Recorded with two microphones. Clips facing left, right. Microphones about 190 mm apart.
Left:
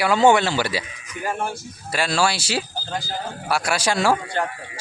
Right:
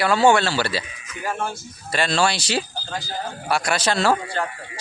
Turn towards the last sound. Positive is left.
turn(degrees=15)  # may be behind; listen again after turning